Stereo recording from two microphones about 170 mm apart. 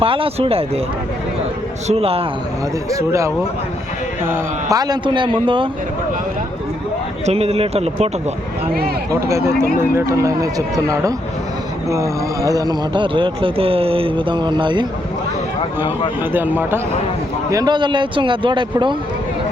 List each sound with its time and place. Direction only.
0.0 s speech: 30° right (ahead or behind)
1.9 s speech: 35° right (ahead or behind)
2.9 s speech: 15° right (ahead or behind)
7.3 s speech: 35° right (ahead or behind)
9.2 s speech: 15° right (ahead or behind)
16.3 s speech: 10° right (ahead or behind)
17.5 s speech: 25° right (ahead or behind)